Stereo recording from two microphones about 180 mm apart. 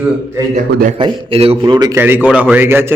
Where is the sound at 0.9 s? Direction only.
30° right (ahead or behind).